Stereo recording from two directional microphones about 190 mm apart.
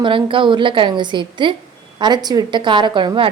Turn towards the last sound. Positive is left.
turn(degrees=-25)  # may be behind; listen again after turning